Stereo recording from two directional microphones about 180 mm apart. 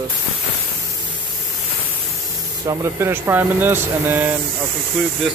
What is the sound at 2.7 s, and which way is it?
Speech, 15° right (ahead or behind).